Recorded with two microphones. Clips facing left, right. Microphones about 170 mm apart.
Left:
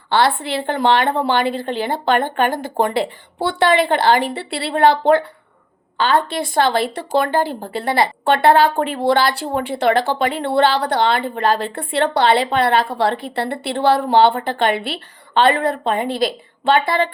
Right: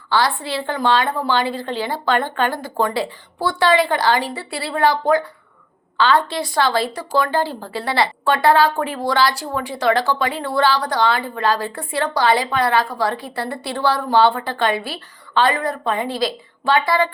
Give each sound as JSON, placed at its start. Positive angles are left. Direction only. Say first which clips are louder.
{"t": 0.1, "sound": "a woman's voice", "louder": "left 3 dB", "side_deg": 55}